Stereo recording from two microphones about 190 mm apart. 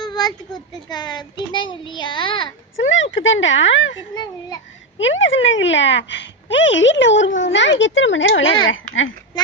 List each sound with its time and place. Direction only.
0.0 s a sound: 20° left (ahead or behind)
0.9 s a child's voice: 20° left (ahead or behind)
2.8 s speech: 90° left
4.1 s a child's voice: 20° left (ahead or behind)
4.9 s speech: 80° left
8.6 s speech: 90° left